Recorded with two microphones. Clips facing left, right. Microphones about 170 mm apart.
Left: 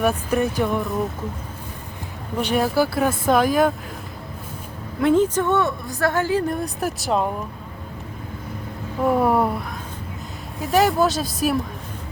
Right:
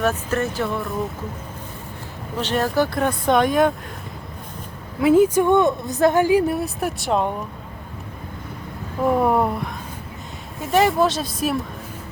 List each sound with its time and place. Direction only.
0.0 s speech: 10° left (ahead or behind)
2.4 s speech: 10° left (ahead or behind)
4.9 s a woman's voice: 5° right (ahead or behind)
9.0 s speech: centre (ahead or behind)